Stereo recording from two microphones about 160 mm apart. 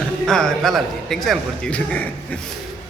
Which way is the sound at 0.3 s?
5° left (ahead or behind).